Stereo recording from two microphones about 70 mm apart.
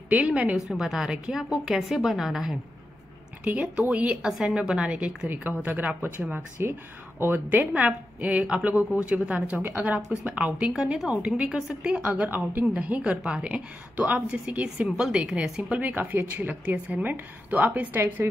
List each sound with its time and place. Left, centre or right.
0.1 s a woman's voice: centre
0.7 s a woman's voice: centre
1.6 s a woman's voice: centre
3.4 s a woman's voice: centre
10.7 s a woman's voice: centre
12.5 s a woman's voice: right
15.7 s a woman's voice: right